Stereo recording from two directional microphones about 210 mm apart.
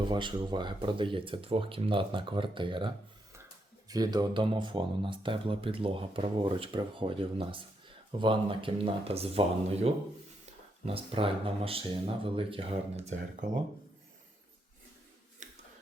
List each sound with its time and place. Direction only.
0.1 s speech: 20° right (ahead or behind)
10.8 s speech: 25° right (ahead or behind)